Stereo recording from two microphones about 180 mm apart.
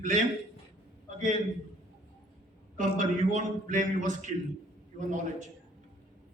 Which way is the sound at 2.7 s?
45° right (ahead or behind).